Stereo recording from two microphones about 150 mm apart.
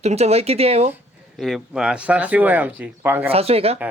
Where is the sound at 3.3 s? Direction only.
40° right (ahead or behind).